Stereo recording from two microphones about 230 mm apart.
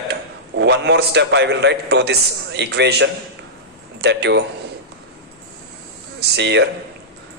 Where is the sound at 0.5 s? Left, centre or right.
Right.